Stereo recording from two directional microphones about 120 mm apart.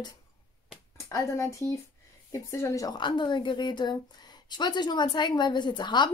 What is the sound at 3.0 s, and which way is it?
Speech, 40° left (ahead or behind).